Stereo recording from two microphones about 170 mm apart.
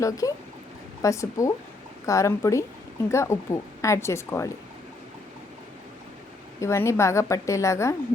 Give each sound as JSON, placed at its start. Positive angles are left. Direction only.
{"t": 0.0, "sound": "speech", "side_deg": 20}
{"t": 6.6, "sound": "speech", "side_deg": 15}